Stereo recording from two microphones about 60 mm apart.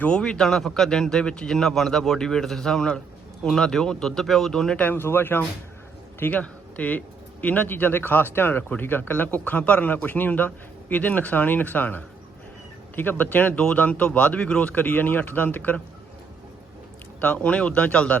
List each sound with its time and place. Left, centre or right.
0.1 s a man's voice: centre
4.8 s speech: left
6.3 s speech: left
17.2 s speech: left